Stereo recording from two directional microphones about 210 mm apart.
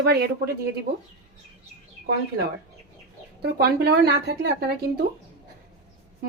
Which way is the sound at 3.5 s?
50° right (ahead or behind).